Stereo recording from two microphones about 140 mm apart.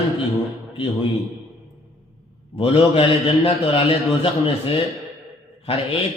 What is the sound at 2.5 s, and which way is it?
A man's voice, 40° left (ahead or behind).